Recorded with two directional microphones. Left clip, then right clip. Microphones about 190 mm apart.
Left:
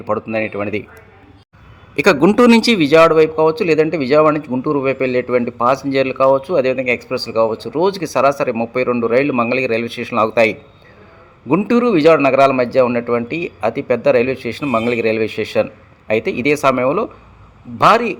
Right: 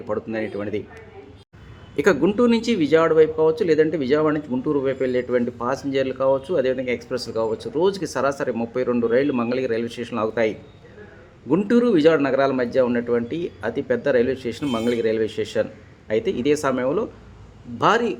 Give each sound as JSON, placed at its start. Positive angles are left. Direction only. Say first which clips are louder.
{"t": 0.0, "sound": "speech", "louder": "left 7 dB", "side_deg": 20}
{"t": 2.2, "sound": "speech", "louder": "left 8 dB", "side_deg": 45}